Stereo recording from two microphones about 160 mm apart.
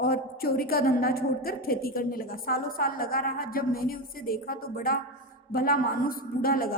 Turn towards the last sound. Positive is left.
turn(degrees=65)  # may be behind; listen again after turning